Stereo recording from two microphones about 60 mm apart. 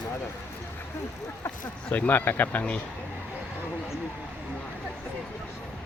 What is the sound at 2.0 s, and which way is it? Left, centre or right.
Speech, left.